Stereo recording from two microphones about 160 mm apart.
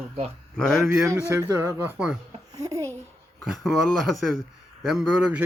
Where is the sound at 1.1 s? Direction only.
15° right (ahead or behind).